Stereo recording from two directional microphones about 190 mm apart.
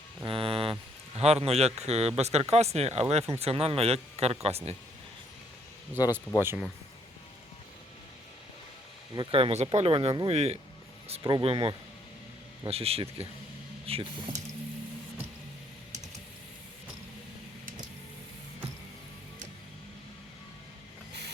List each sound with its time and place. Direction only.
0.3 s a man's voice: 30° right (ahead or behind)
6.4 s speech: 10° right (ahead or behind)
9.1 s speech: 30° right (ahead or behind)
11.2 s speech: 25° right (ahead or behind)